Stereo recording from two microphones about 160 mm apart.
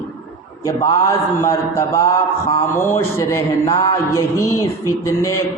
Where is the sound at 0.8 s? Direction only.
20° left (ahead or behind).